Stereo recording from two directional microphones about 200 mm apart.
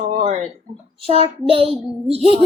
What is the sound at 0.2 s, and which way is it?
Speech, 35° right (ahead or behind).